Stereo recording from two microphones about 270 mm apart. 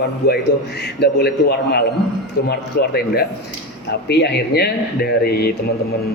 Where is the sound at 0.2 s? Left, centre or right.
Left.